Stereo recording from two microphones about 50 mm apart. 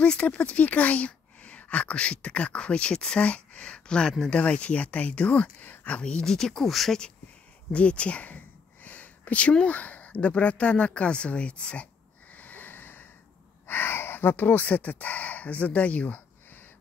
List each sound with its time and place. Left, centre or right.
0.0 s speech: left
6.2 s speech: centre
7.7 s speech: left
8.8 s a sound: left
9.8 s speech: left
12.4 s sniff: left
13.7 s speech: left